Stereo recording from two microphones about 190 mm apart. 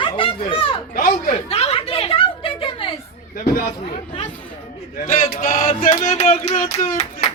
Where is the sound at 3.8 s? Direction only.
25° left (ahead or behind).